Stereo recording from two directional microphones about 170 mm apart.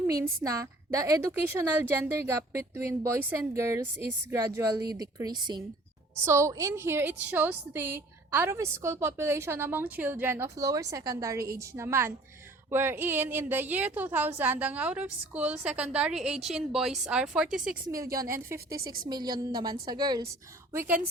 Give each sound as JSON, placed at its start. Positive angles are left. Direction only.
{"t": 0.4, "sound": "a woman's voice", "side_deg": -20}
{"t": 17.9, "sound": "a woman's voice", "side_deg": -20}
{"t": 20.7, "sound": "a woman's voice", "side_deg": -10}